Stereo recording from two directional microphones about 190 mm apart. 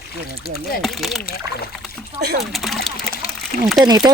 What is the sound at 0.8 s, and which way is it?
Speech, centre (ahead or behind).